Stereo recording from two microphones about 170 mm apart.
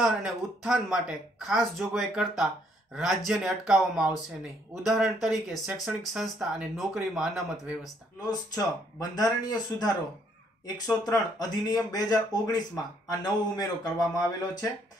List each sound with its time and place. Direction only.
0.0 s speech: 5° right (ahead or behind)
7.8 s speech: 20° left (ahead or behind)